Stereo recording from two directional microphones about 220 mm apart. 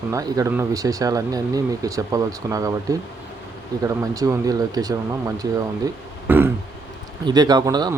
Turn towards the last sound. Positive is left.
turn(degrees=-15)  # may be behind; listen again after turning